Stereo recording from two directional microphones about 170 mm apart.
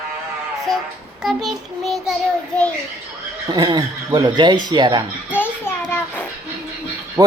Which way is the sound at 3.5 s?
25° right (ahead or behind).